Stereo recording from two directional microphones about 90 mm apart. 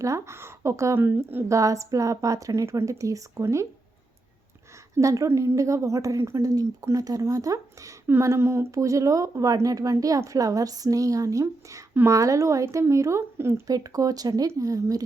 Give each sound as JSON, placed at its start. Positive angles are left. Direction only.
{"t": 0.0, "sound": "a woman's voice", "side_deg": -30}
{"t": 1.5, "sound": "speech", "side_deg": -35}
{"t": 4.9, "sound": "speech", "side_deg": -35}